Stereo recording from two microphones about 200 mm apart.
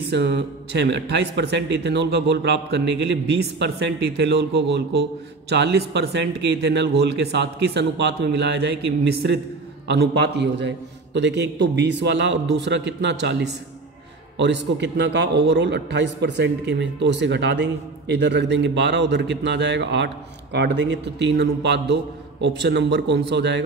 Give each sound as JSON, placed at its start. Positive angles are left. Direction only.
{"t": 0.1, "sound": "a man's voice", "side_deg": -60}